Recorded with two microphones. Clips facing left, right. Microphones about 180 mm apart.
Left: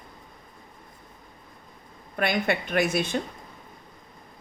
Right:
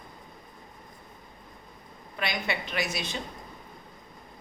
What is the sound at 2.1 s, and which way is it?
A woman's voice, 55° left (ahead or behind).